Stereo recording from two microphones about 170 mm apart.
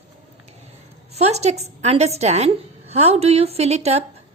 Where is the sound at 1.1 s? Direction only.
40° right (ahead or behind).